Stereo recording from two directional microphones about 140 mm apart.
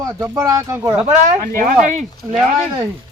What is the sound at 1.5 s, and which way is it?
Speech, 70° right (ahead or behind).